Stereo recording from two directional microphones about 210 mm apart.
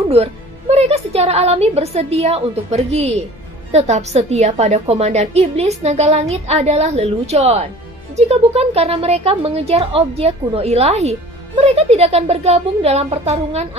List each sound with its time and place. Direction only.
0.1 s a woman's voice: 30° right (ahead or behind)